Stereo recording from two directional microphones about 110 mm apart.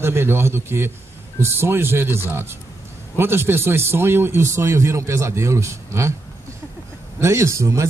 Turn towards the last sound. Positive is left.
turn(degrees=-25)  # may be behind; listen again after turning